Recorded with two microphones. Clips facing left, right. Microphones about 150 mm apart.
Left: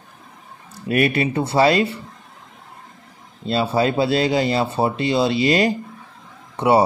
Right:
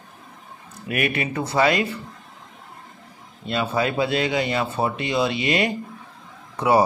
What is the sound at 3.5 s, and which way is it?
Speech, 30° left (ahead or behind).